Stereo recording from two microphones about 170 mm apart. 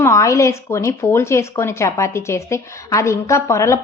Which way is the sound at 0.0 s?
15° left (ahead or behind).